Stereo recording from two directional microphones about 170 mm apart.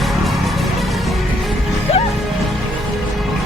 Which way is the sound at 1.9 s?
35° left (ahead or behind).